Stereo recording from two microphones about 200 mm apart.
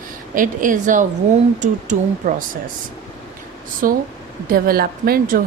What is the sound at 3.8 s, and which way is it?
Speech, 45° right (ahead or behind).